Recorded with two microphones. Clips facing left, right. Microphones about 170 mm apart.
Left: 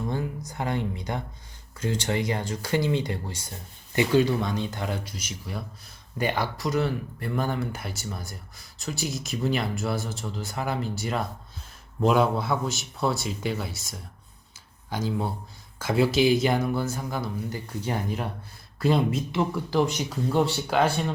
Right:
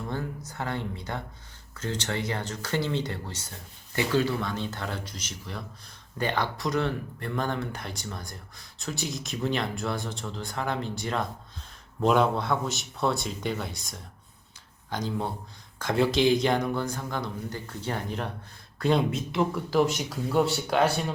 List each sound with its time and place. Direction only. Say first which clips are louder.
0.1 s speech: left 3 dB; 15° left (ahead or behind)